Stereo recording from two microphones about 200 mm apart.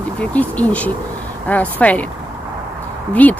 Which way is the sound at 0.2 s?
5° left (ahead or behind).